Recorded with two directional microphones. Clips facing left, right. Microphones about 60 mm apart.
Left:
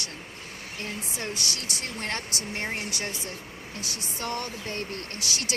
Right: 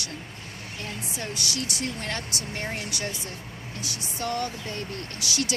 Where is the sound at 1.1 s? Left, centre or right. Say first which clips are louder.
Right 3 dB; left.